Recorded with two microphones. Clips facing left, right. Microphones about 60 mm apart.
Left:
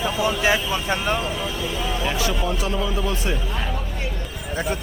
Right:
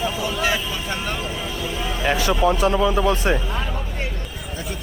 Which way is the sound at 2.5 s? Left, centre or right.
Right.